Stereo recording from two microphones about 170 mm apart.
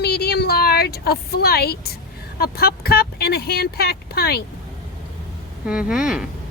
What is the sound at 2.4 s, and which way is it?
A woman's voice, 65° left (ahead or behind).